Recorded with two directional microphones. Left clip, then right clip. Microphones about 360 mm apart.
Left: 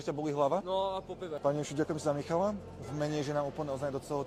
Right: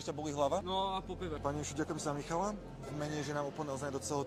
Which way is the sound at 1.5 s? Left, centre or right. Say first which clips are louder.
Left 7 dB; left.